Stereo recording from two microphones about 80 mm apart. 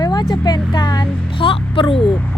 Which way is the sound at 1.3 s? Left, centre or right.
Left.